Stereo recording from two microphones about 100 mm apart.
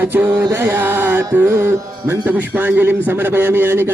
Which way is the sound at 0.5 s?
20° right (ahead or behind).